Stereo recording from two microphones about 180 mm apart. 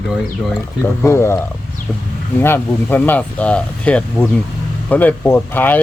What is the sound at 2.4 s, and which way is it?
Speech, 10° left (ahead or behind).